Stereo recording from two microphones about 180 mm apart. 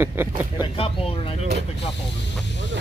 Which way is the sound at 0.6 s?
30° left (ahead or behind).